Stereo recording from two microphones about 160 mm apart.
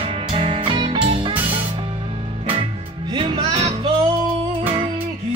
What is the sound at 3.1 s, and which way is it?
Music, 30° right (ahead or behind).